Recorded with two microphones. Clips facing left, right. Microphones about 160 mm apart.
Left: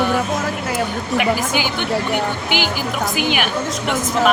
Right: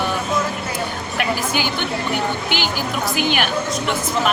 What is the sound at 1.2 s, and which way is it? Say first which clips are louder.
Speech: left 1 dB; 15° left (ahead or behind).